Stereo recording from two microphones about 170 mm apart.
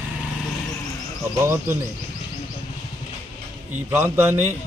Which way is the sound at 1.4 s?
15° right (ahead or behind).